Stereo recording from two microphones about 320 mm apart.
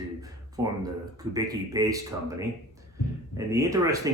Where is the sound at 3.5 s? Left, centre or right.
Centre.